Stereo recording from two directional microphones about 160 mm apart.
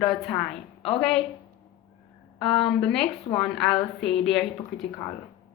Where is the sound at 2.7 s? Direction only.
5° left (ahead or behind).